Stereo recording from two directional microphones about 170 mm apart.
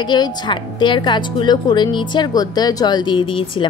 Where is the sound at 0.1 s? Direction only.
25° left (ahead or behind).